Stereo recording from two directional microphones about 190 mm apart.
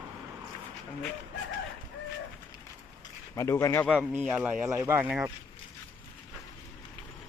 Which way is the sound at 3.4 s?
15° left (ahead or behind).